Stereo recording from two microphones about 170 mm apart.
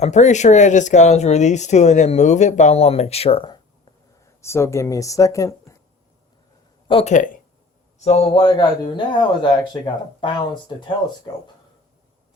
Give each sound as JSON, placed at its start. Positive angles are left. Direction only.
{"t": 0.0, "sound": "speech", "side_deg": 45}
{"t": 4.4, "sound": "speech", "side_deg": 15}
{"t": 6.8, "sound": "speech", "side_deg": 35}